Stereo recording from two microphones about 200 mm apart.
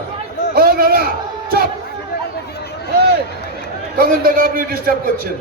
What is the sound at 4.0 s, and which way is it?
Speech, 50° right (ahead or behind).